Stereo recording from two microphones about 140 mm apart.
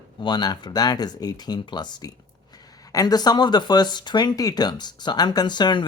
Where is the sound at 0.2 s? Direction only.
30° left (ahead or behind).